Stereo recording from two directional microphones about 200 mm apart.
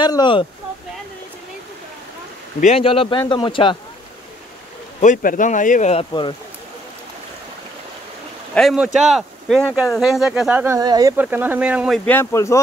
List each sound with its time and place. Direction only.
0.0 s a man's voice: 20° left (ahead or behind)
2.6 s a man's voice: 30° left (ahead or behind)
5.0 s speech: 40° left (ahead or behind)
8.5 s speech: centre (ahead or behind)
12.1 s speech: 10° left (ahead or behind)